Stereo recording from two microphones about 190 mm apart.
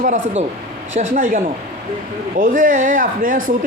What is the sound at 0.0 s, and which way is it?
Speech, 40° right (ahead or behind).